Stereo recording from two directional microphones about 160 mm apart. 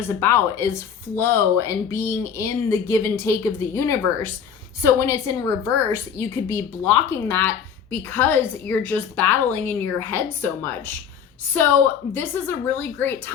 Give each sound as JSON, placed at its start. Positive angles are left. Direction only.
{"t": 0.2, "sound": "a woman's voice", "side_deg": 15}
{"t": 12.1, "sound": "speech", "side_deg": 10}